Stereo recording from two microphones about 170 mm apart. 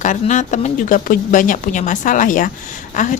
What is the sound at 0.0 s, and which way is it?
A woman's voice, 45° left (ahead or behind).